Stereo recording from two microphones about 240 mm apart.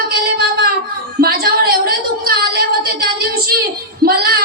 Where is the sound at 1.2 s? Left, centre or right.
Right.